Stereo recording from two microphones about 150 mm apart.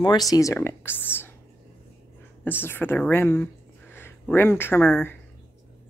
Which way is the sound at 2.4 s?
15° left (ahead or behind).